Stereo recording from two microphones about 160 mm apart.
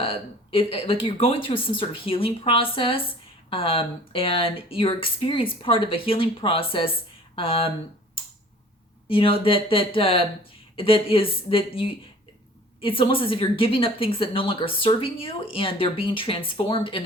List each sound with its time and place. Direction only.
0.0 s speech: 35° left (ahead or behind)
9.0 s speech: 35° left (ahead or behind)